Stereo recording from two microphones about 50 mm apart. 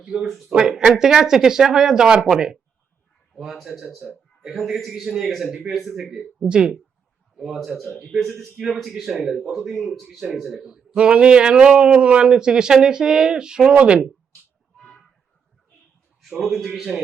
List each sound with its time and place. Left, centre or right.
0.0 s a man's voice: centre
3.5 s a man's voice: centre
10.9 s a man's voice: right
14.8 s a sound: centre
16.4 s speech: centre